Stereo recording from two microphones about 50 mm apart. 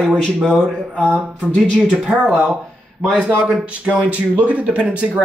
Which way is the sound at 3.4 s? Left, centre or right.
Centre.